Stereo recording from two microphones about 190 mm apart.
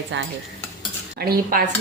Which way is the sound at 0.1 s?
70° right (ahead or behind).